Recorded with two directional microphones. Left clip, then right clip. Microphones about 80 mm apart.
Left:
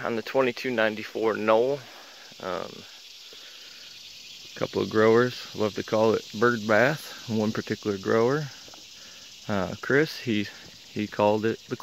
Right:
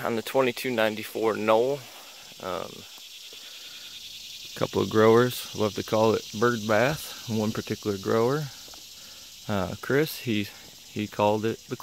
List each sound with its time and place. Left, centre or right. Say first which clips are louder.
0.0 s speech: even; right
2.4 s cricket: left 1 dB; centre
4.6 s speech: right 1 dB; right
4.9 s speech: right 1 dB; right
6.3 s cricket: left 2 dB; centre
7.3 s speech: left 2 dB; centre
7.7 s speech: left 1 dB; centre
9.5 s speech: left 2 dB; right
11.0 s cricket: left 1 dB; centre